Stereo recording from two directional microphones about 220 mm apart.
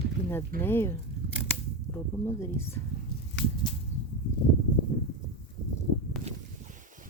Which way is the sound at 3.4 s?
55° left (ahead or behind).